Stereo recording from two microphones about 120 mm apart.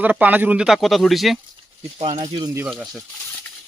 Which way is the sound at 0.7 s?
Centre (ahead or behind).